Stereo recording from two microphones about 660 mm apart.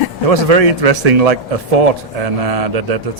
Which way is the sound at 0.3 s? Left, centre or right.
Right.